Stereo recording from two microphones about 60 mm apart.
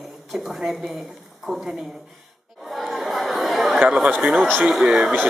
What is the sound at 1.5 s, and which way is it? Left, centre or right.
Speech, centre.